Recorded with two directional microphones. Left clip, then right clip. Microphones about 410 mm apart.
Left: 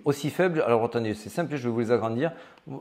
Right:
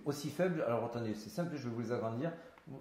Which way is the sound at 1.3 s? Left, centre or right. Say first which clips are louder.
Left 12 dB; left.